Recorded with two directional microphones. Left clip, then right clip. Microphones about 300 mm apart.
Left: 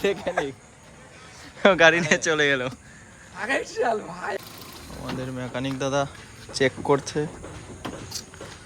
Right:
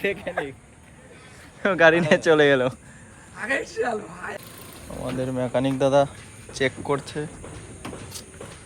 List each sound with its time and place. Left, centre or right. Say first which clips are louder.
0.0 s speech: left 2 dB; centre
1.8 s speech: right 1 dB; centre
3.3 s a man's voice: even; left
5.1 s speech: right 8 dB; centre
6.6 s speech: left 3 dB; centre